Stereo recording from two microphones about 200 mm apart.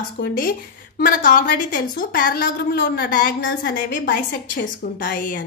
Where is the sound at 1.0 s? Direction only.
45° left (ahead or behind).